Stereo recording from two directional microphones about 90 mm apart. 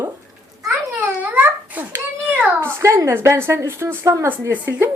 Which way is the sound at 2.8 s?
35° right (ahead or behind).